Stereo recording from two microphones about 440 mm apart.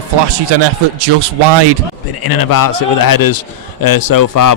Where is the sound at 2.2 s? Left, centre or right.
Left.